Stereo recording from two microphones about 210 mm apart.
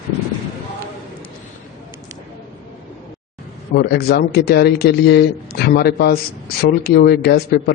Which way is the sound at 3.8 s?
45° left (ahead or behind).